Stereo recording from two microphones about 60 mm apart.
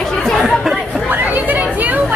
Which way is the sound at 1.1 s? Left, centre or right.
Right.